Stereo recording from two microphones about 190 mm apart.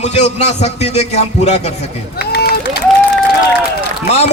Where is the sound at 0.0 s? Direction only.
35° left (ahead or behind).